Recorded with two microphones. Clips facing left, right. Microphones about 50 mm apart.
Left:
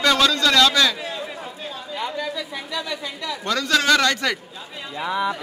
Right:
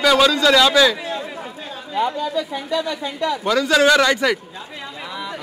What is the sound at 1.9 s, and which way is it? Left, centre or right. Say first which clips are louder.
Speech: right 7 dB; right.